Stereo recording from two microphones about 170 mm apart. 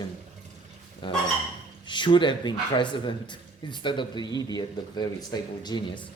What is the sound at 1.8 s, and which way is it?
A man's voice, 25° left (ahead or behind).